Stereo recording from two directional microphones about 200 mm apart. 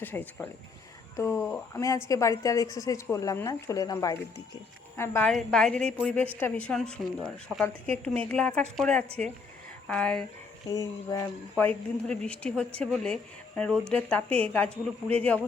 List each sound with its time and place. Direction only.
0.0 s a woman's voice: 10° left (ahead or behind)
10.7 s speech: 15° left (ahead or behind)